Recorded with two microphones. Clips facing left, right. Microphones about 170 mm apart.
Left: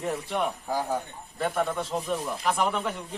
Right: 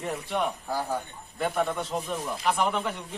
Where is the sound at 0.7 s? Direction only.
15° left (ahead or behind).